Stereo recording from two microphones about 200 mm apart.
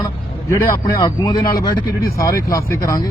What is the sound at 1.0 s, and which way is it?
Speech, 20° left (ahead or behind).